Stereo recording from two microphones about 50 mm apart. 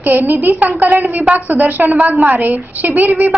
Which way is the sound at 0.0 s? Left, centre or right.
Right.